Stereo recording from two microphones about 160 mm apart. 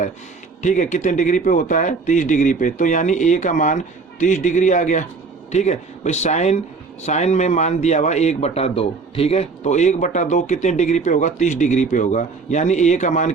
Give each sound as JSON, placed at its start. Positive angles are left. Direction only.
{"t": 0.6, "sound": "a man's voice", "side_deg": 50}